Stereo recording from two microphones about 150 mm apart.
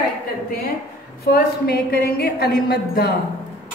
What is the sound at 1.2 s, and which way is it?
A woman's voice, 90° left.